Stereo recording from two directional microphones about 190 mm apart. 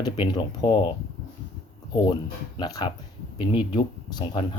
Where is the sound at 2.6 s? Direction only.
20° left (ahead or behind).